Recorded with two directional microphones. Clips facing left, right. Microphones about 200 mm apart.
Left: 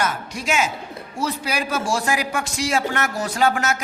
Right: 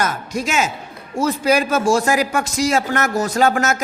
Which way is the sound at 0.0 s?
45° right (ahead or behind).